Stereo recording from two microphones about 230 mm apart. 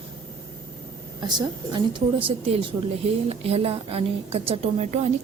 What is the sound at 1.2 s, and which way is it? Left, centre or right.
A woman's voice, centre.